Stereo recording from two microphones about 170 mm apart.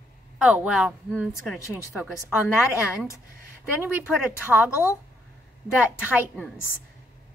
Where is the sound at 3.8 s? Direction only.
5° right (ahead or behind).